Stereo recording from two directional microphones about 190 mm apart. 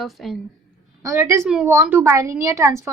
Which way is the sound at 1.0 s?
15° right (ahead or behind).